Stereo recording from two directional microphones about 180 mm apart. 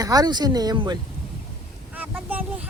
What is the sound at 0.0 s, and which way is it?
Speech, 20° right (ahead or behind).